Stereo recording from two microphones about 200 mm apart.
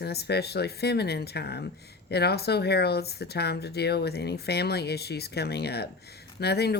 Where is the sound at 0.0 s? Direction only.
55° left (ahead or behind).